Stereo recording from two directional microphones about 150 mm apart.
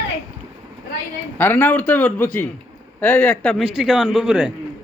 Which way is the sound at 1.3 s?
15° left (ahead or behind).